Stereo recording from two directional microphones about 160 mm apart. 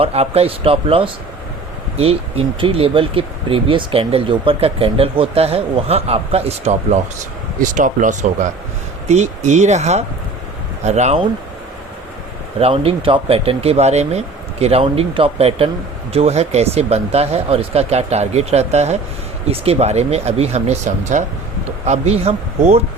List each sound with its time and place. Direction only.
0.0 s speech: 40° right (ahead or behind)
7.6 s speech: 55° right (ahead or behind)
12.5 s speech: 35° right (ahead or behind)